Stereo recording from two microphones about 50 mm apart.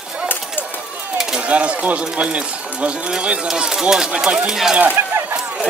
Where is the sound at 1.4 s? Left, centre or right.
Right.